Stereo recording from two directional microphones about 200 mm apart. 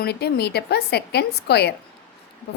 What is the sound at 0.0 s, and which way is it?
A woman's voice, 55° left (ahead or behind).